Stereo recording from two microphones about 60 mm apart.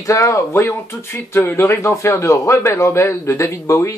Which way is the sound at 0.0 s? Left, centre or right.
Left.